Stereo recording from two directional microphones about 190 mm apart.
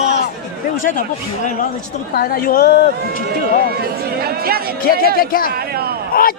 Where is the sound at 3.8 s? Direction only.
55° right (ahead or behind).